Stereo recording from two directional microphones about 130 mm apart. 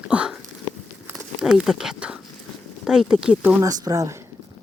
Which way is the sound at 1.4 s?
5° right (ahead or behind).